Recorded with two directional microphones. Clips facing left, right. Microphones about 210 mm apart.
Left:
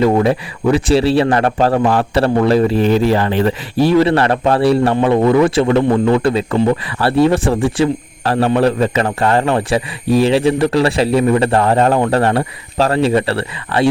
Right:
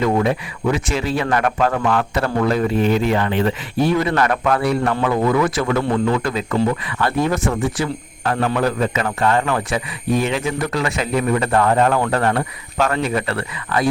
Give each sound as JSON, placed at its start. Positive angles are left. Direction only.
{"t": 0.0, "sound": "a man's voice", "side_deg": 30}